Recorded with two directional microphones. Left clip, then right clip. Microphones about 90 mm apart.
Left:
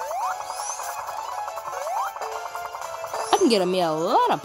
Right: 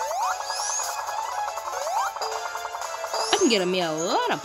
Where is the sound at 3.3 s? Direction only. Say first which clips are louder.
Left 3 dB; 50° left (ahead or behind).